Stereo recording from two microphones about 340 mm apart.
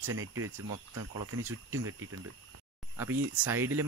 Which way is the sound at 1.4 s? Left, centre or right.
Centre.